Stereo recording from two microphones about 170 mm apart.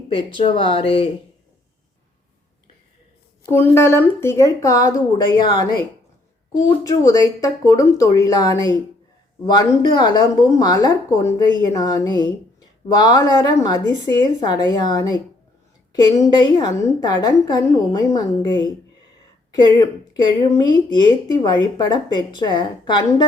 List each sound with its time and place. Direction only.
0.1 s speech: 30° left (ahead or behind)
3.5 s speech: 15° left (ahead or behind)
6.8 s speech: 20° left (ahead or behind)